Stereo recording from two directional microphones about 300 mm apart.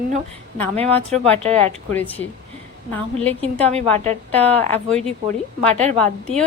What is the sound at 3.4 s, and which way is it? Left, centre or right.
Speech, right.